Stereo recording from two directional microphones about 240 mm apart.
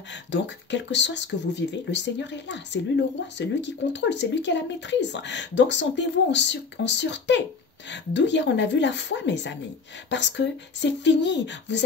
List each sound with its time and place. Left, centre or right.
0.1 s speech: left